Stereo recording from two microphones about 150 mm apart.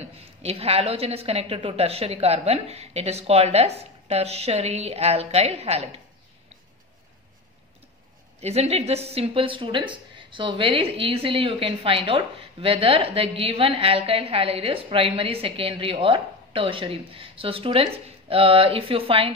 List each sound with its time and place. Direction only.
0.0 s a woman's voice: 45° right (ahead or behind)
8.4 s speech: 45° right (ahead or behind)